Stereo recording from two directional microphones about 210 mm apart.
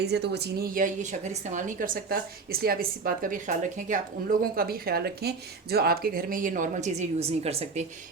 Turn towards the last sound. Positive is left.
turn(degrees=-30)  # may be behind; listen again after turning